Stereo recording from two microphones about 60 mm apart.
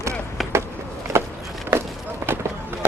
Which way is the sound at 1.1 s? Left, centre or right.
Right.